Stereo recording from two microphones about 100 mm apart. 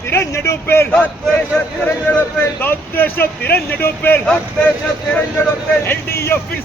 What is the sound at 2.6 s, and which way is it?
Speech, 20° left (ahead or behind).